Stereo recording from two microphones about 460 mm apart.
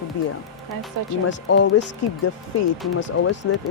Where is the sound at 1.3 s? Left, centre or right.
Left.